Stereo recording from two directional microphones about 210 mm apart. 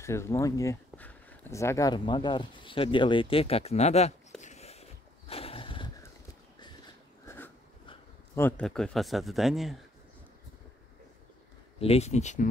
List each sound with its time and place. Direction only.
0.0 s speech: 15° left (ahead or behind)
7.2 s a sound: 10° left (ahead or behind)
8.4 s speech: 10° left (ahead or behind)
11.8 s speech: 30° left (ahead or behind)